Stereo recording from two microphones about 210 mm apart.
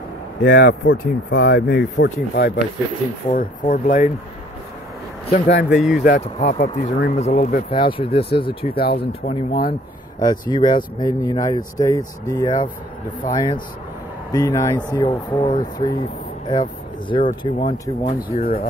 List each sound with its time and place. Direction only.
0.4 s speech: 50° left (ahead or behind)
5.3 s speech: 45° left (ahead or behind)
5.7 s speech: centre (ahead or behind)
6.0 s speech: 50° left (ahead or behind)
6.5 s speech: 35° left (ahead or behind)
7.7 s speech: 25° left (ahead or behind)
8.7 s speech: 45° left (ahead or behind)
10.1 s a man's voice: 20° left (ahead or behind)
17.1 s speech: 20° left (ahead or behind)
18.4 s speech: 45° left (ahead or behind)